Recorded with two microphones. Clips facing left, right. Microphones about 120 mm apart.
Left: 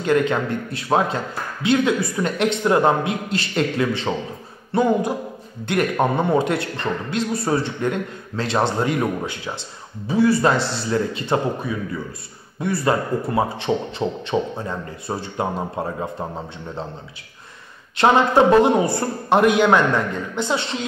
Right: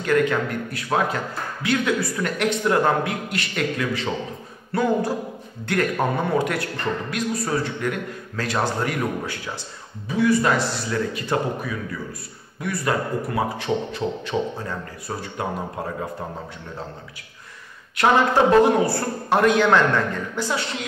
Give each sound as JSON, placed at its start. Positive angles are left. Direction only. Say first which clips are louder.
{"t": 0.0, "sound": "a man's voice", "louder": "left 1 dB", "side_deg": 20}
{"t": 17.9, "sound": "a man's voice", "louder": "left 3 dB", "side_deg": 20}